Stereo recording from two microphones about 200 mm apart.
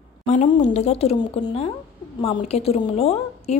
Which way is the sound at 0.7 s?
30° left (ahead or behind).